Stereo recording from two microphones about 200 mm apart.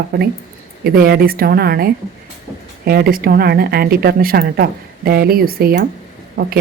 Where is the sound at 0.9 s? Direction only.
50° right (ahead or behind).